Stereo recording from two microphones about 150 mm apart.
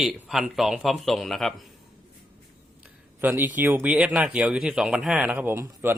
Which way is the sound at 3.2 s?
15° right (ahead or behind).